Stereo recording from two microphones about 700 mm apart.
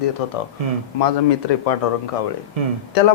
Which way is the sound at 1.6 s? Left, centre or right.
Left.